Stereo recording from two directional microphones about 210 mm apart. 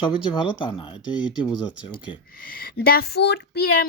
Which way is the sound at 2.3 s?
45° left (ahead or behind).